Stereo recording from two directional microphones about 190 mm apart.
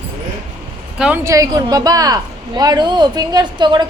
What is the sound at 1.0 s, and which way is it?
Speech, 10° right (ahead or behind).